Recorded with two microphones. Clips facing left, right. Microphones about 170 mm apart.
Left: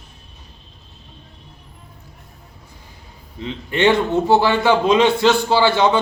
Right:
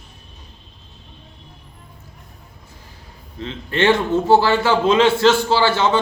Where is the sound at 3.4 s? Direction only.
15° left (ahead or behind).